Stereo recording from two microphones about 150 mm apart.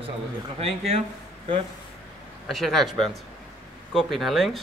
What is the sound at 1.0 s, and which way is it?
Speech, 35° right (ahead or behind).